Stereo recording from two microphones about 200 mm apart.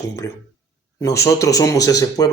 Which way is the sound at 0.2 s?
15° left (ahead or behind).